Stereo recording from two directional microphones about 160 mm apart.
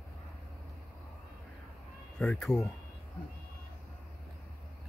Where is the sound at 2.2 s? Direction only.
5° left (ahead or behind).